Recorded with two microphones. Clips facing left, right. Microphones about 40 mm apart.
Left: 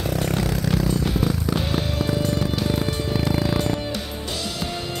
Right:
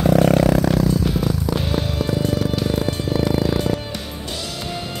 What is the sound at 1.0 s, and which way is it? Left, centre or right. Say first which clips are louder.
Music: right 2 dB; centre.